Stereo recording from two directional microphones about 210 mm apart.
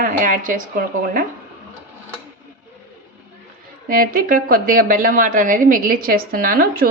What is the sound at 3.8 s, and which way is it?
A woman's voice, 40° right (ahead or behind).